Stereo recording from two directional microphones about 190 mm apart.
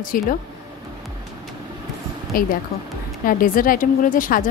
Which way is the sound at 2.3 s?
50° left (ahead or behind).